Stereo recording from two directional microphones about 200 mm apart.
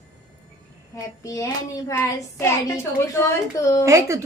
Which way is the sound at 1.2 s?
15° left (ahead or behind).